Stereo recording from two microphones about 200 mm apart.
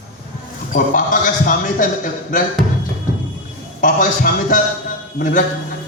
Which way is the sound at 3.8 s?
40° left (ahead or behind).